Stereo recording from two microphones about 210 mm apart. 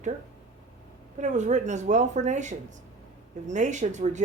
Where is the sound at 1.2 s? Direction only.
35° right (ahead or behind).